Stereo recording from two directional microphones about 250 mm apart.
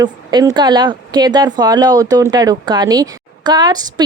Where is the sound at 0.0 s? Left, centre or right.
Centre.